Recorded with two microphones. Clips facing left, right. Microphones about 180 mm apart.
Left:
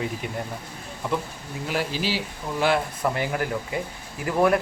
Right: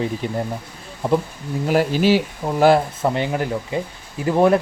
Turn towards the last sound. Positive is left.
turn(degrees=-25)  # may be behind; listen again after turning